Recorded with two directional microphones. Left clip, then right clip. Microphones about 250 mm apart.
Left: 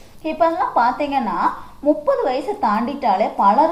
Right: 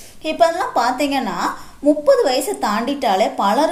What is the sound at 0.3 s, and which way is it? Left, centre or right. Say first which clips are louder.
A woman's voice: right 2 dB; right.